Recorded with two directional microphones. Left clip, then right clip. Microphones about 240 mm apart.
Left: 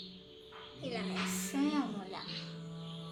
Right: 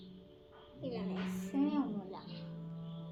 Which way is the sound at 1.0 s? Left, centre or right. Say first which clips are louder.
Left 5 dB; left.